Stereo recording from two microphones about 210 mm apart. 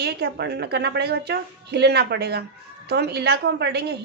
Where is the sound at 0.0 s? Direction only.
50° right (ahead or behind).